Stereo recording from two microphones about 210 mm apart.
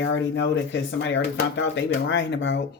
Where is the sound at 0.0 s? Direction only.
60° left (ahead or behind).